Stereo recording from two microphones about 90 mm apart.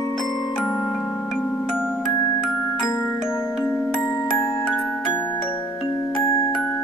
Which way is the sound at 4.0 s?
40° left (ahead or behind).